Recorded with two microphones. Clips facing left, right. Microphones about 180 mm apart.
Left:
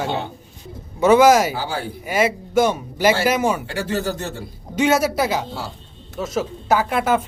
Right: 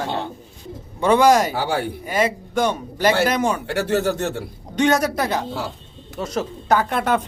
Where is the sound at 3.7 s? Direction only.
65° right (ahead or behind).